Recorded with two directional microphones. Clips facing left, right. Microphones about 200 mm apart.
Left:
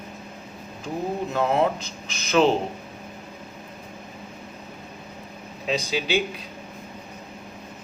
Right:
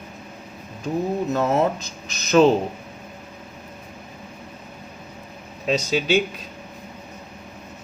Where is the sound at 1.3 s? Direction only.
40° right (ahead or behind).